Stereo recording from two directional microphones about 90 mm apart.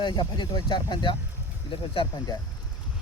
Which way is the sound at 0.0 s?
60° left (ahead or behind).